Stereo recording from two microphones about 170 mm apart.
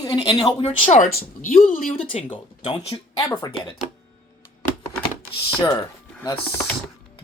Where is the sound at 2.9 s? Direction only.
20° left (ahead or behind).